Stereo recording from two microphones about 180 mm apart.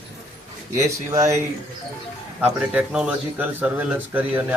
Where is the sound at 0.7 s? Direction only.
15° right (ahead or behind).